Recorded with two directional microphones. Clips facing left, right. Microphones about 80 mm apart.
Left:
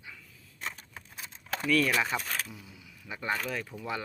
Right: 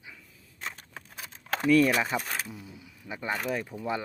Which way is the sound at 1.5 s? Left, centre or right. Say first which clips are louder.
Right 6 dB; right.